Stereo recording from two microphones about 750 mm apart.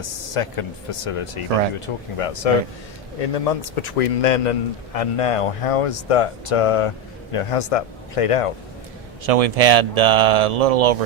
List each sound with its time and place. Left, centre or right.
0.0 s a man's voice: left
4.9 s speech: left
9.2 s speech: right